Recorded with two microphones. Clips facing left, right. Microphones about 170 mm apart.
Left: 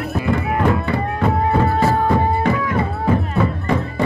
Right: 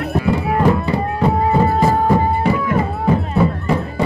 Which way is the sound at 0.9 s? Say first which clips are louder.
Right 2 dB; 15° right (ahead or behind).